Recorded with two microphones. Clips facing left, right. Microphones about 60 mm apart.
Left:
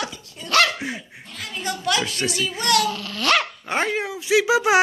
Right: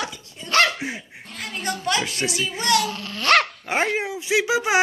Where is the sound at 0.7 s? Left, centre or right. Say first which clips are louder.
Even; centre.